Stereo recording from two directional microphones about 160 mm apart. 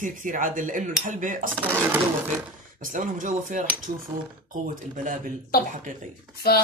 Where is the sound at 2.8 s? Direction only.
55° right (ahead or behind).